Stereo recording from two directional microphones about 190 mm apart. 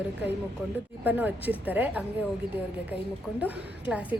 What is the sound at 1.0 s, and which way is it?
A woman's voice, 10° right (ahead or behind).